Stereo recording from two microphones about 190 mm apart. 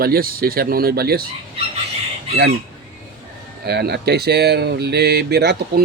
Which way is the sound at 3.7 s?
60° right (ahead or behind).